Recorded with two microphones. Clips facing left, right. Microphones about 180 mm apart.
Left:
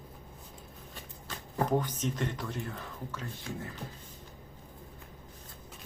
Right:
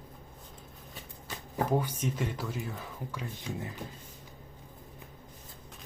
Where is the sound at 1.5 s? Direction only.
10° right (ahead or behind).